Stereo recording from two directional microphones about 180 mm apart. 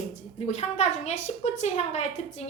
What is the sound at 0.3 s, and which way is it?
A woman's voice, 40° left (ahead or behind).